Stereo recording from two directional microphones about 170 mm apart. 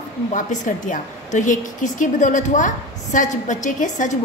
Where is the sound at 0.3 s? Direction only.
45° left (ahead or behind).